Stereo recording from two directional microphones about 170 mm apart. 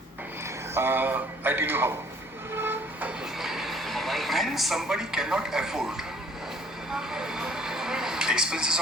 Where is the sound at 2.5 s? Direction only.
10° right (ahead or behind).